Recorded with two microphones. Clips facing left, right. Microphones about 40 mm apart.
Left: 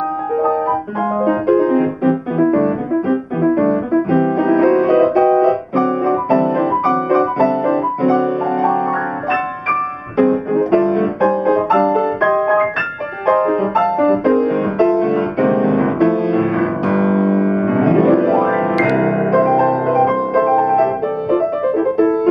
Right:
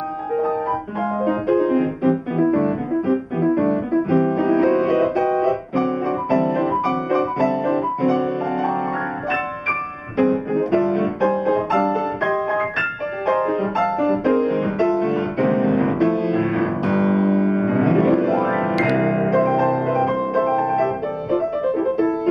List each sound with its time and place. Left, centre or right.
0.4 s piano: centre
1.2 s music: centre
10.1 s music: centre
20.4 s music: centre